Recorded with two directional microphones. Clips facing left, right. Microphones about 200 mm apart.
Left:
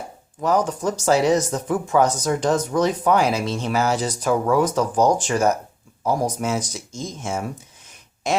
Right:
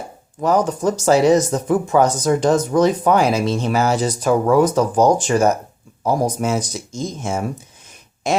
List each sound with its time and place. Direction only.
0.4 s speech: 45° right (ahead or behind)